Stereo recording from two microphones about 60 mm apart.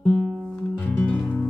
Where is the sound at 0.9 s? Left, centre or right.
Left.